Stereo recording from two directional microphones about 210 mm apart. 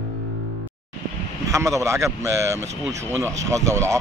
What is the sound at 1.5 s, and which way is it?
Speech, 15° right (ahead or behind).